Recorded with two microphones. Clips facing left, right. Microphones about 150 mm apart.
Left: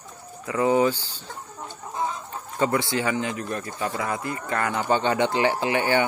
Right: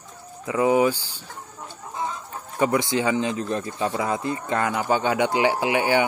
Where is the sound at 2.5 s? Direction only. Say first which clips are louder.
Right 2 dB; 15° right (ahead or behind).